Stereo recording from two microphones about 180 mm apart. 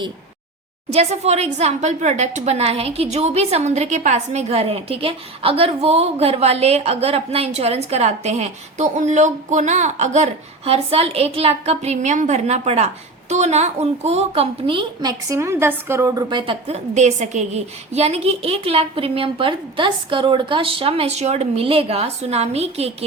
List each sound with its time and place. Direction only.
0.9 s a woman's voice: 35° right (ahead or behind)
15.3 s a woman's voice: 15° right (ahead or behind); by 23.0 s 35° right (ahead or behind)